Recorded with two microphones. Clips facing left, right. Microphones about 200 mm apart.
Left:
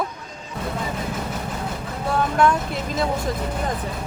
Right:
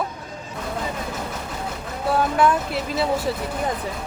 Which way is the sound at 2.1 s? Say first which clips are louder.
Even; 5° right (ahead or behind).